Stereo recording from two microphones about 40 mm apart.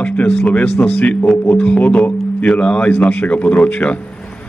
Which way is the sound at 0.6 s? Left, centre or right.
Left.